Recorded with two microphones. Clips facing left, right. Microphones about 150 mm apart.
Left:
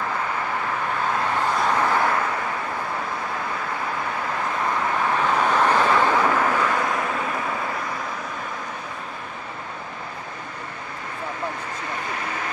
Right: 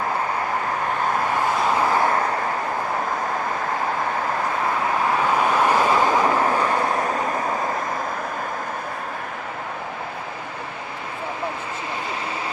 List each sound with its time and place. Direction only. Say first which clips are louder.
2.0 s vehicle: right 2 dB; 30° right (ahead or behind)
5.4 s vehicle: even; 10° right (ahead or behind)
6.3 s vehicle: right 1 dB; 30° right (ahead or behind)